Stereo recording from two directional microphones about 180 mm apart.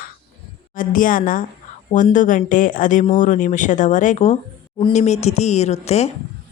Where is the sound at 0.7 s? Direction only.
50° left (ahead or behind).